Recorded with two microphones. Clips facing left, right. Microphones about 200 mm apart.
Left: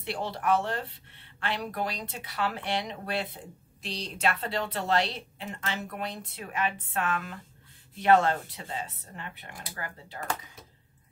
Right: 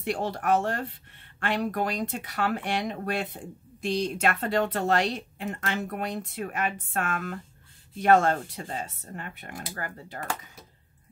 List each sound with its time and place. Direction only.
0.0 s speech: 50° right (ahead or behind)